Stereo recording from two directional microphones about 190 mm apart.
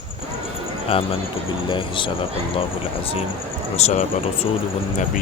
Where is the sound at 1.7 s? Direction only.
25° left (ahead or behind).